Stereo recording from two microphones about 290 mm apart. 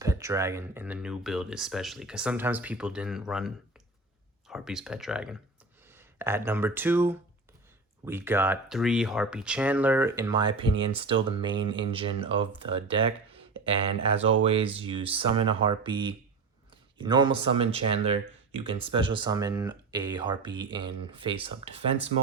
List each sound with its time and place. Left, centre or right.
0.0 s speech: centre